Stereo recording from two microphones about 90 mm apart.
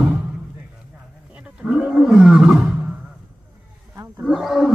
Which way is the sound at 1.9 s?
5° right (ahead or behind).